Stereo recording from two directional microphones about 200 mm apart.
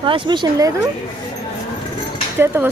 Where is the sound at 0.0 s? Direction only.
25° right (ahead or behind).